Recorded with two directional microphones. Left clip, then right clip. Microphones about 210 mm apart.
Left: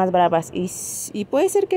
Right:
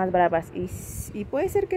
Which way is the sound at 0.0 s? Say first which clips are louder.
Left 4 dB; 20° left (ahead or behind).